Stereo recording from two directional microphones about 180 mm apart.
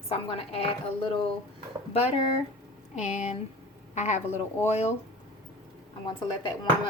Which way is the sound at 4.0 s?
40° left (ahead or behind).